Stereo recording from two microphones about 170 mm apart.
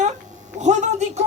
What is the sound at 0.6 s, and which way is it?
Speech, 40° right (ahead or behind).